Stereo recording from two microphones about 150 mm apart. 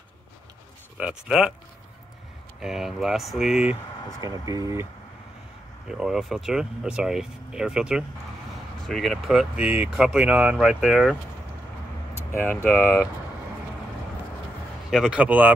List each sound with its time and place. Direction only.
0.9 s speech: 5° right (ahead or behind)
2.6 s speech: 5° right (ahead or behind)
4.2 s speech: 25° right (ahead or behind)
5.9 s speech: 5° right (ahead or behind)
12.2 s a sound: 15° left (ahead or behind)
12.6 s speech: 10° left (ahead or behind)
14.9 s a man's voice: 5° right (ahead or behind)